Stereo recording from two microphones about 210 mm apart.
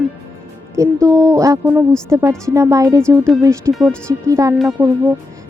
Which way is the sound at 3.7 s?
Centre (ahead or behind).